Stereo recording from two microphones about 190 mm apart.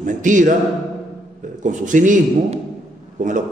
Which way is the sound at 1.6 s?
40° right (ahead or behind).